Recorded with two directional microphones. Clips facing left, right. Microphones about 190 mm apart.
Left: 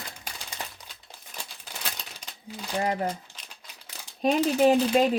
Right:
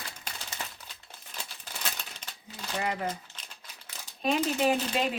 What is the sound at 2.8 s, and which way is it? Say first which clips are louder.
Speech: left 5 dB; 40° left (ahead or behind).